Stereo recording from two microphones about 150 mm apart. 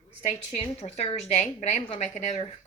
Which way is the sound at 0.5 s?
45° left (ahead or behind).